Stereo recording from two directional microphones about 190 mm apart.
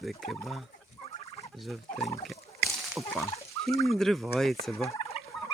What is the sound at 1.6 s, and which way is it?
Speech, centre (ahead or behind).